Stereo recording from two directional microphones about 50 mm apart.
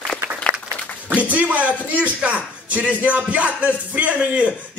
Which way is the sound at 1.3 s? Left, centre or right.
Right.